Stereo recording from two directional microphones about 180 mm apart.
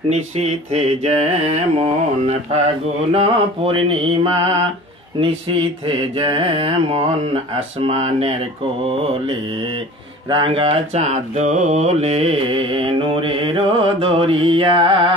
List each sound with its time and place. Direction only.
0.1 s mantra: 35° right (ahead or behind)
3.1 s mantra: 30° right (ahead or behind)
10.3 s mantra: 30° right (ahead or behind)